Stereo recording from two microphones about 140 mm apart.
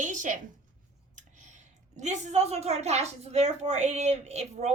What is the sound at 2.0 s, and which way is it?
Speech, 55° right (ahead or behind).